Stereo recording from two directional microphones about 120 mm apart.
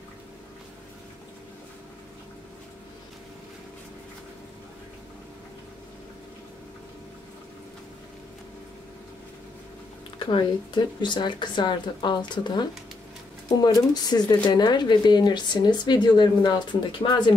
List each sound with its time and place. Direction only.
10.3 s speech: 40° left (ahead or behind)